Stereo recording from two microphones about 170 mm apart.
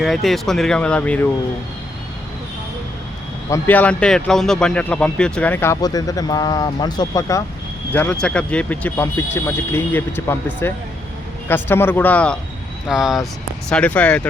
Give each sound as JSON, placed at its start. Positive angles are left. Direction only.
{"t": 0.0, "sound": "speech", "side_deg": 0}
{"t": 3.5, "sound": "speech", "side_deg": 10}
{"t": 5.8, "sound": "speech", "side_deg": 20}
{"t": 7.9, "sound": "speech", "side_deg": 10}